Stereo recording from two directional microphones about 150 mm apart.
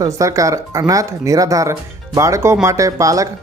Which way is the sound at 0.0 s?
20° right (ahead or behind).